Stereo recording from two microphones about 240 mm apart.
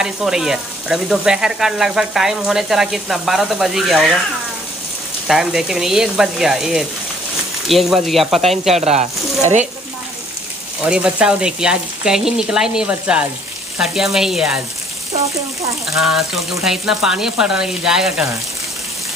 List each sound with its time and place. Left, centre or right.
0.0 s speech: centre
5.3 s speech: centre
8.8 s speech: right
10.9 s speech: centre
16.0 s speech: centre